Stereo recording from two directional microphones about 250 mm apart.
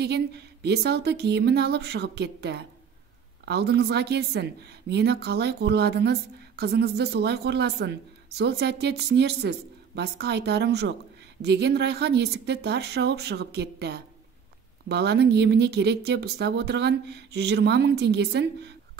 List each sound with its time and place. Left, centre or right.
0.0 s a woman's voice: right